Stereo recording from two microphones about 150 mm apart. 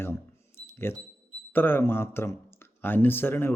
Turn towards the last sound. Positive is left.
turn(degrees=15)  # may be behind; listen again after turning